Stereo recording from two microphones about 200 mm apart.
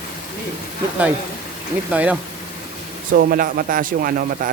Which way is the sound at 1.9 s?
5° right (ahead or behind).